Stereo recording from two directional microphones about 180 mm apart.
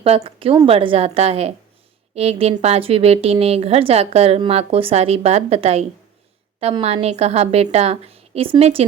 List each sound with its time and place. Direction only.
0.2 s a woman's voice: 30° right (ahead or behind)